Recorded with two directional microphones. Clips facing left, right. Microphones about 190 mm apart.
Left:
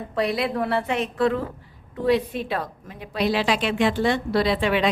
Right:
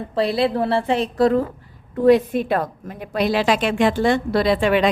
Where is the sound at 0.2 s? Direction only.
30° right (ahead or behind).